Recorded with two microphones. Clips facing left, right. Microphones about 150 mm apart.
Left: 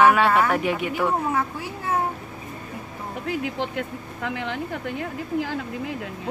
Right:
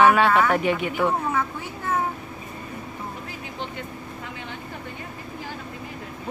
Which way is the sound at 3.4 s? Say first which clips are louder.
Left 6 dB; 90° left.